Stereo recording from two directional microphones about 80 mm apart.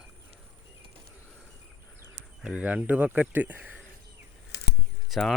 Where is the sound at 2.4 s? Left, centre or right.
Centre.